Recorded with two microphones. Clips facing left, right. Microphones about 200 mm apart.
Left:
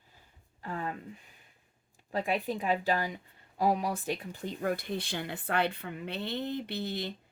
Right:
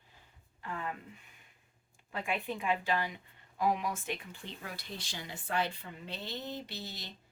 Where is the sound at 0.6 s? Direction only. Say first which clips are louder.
Left 3 dB; 40° left (ahead or behind).